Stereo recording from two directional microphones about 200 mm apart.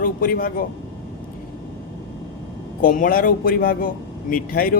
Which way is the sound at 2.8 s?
45° left (ahead or behind).